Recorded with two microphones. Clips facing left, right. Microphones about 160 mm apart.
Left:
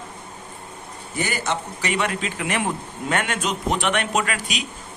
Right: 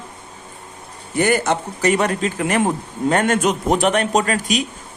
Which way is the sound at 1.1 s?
55° right (ahead or behind).